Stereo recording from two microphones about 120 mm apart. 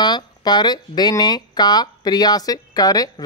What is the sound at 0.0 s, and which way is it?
Speech, 35° left (ahead or behind).